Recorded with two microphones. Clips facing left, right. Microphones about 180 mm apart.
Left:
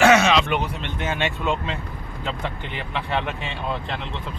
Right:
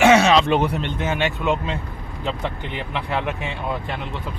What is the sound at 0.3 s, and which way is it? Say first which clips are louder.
Speech: right 4 dB; 40° right (ahead or behind).